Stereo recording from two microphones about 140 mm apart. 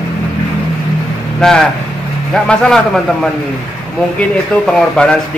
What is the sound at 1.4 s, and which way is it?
Speech, 5° left (ahead or behind).